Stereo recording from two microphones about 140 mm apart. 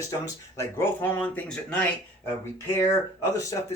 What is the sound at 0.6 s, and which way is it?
Speech, 15° left (ahead or behind).